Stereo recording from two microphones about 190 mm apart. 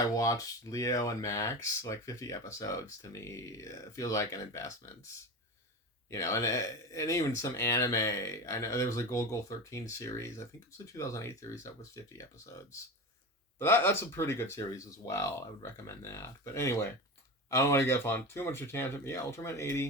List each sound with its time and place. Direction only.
0.2 s speech: 15° left (ahead or behind)
6.1 s speech: 15° left (ahead or behind)